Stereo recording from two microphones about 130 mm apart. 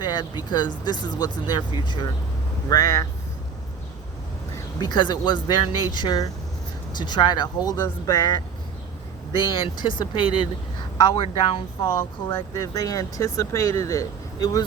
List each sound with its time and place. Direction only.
0.0 s speech: 35° left (ahead or behind)
2.6 s speech: 25° left (ahead or behind)
4.5 s speech: 30° left (ahead or behind)
12.3 s speech: 25° left (ahead or behind)